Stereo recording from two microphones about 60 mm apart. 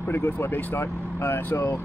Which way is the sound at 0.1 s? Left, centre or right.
Left.